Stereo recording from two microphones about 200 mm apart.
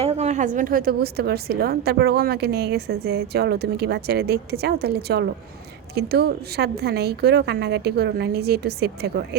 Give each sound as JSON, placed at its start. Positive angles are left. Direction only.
{"t": 0.0, "sound": "a woman's voice", "side_deg": -30}